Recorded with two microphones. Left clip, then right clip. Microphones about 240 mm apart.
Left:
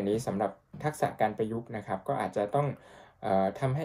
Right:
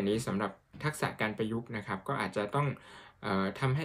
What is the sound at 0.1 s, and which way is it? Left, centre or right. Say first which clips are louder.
Speech: left 3 dB; right.